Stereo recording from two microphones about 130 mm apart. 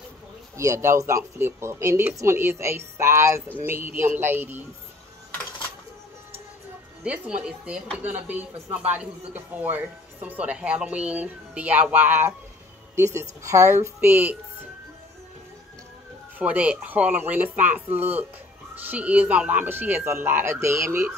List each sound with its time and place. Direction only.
0.6 s a woman's voice: 20° right (ahead or behind)
7.0 s a woman's voice: 10° right (ahead or behind)
16.3 s a woman's voice: 10° right (ahead or behind)